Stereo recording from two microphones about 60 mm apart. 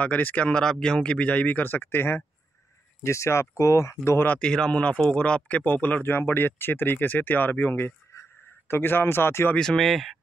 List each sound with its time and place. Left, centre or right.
0.0 s speech: left
0.5 s speech: centre; by 2.2 s left
3.0 s speech: left
4.0 s speech: left
4.4 s speech: centre; by 7.9 s left
8.1 s a sound: left
9.6 s speech: centre